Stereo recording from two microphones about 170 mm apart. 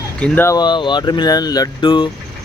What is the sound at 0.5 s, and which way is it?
Speech, 25° left (ahead or behind).